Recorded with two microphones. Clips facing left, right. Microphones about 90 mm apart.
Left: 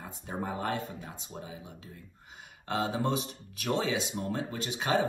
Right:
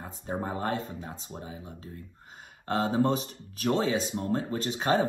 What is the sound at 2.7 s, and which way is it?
Speech, 40° right (ahead or behind).